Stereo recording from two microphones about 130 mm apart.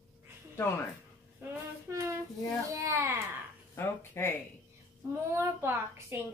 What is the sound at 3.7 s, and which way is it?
Speech, 20° left (ahead or behind).